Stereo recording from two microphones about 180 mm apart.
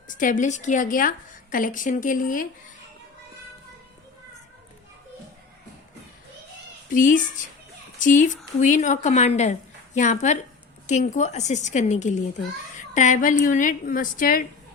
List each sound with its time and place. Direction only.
0.1 s a woman's voice: 45° left (ahead or behind)
6.9 s a woman's voice: 45° left (ahead or behind)
12.7 s a sound: 45° left (ahead or behind)
13.4 s a woman's voice: 45° left (ahead or behind)